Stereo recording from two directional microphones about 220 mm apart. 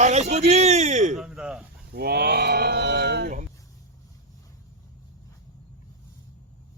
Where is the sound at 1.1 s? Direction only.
Centre (ahead or behind).